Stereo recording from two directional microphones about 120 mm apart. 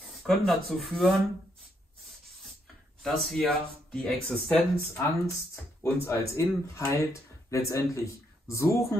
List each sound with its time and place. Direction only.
0.3 s speech: 5° left (ahead or behind)
3.0 s speech: centre (ahead or behind)
4.9 s speech: 20° left (ahead or behind)